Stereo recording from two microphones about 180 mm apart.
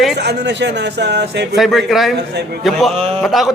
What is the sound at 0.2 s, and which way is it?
A man's voice, 70° right (ahead or behind).